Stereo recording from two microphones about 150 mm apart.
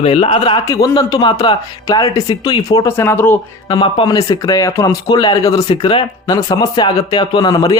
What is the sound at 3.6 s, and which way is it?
Speech, 35° left (ahead or behind).